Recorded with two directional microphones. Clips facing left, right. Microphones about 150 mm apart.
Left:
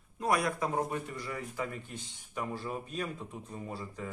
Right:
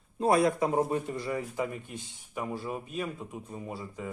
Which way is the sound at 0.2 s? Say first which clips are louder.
Right 6 dB; 25° right (ahead or behind).